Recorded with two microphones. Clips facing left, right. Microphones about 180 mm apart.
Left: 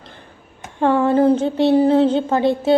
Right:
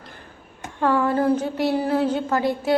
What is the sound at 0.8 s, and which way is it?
A woman's voice, 25° left (ahead or behind).